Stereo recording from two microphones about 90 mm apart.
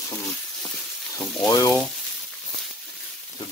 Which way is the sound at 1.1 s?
40° left (ahead or behind).